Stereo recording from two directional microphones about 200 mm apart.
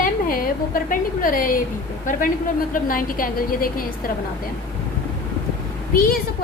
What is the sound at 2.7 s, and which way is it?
A woman's voice, 45° left (ahead or behind).